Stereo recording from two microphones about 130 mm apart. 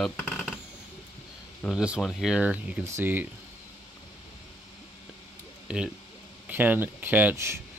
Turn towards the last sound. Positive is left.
turn(degrees=-20)  # may be behind; listen again after turning